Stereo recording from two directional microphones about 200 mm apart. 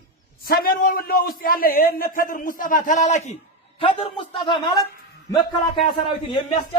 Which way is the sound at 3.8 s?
25° left (ahead or behind).